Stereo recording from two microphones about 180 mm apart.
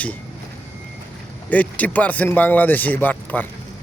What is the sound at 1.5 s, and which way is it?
A man's voice, 10° left (ahead or behind).